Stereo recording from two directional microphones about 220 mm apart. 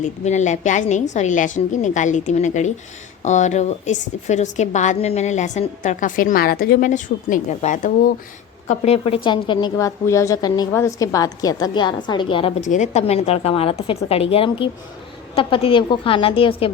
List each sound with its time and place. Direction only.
0.0 s a woman's voice: 30° left (ahead or behind)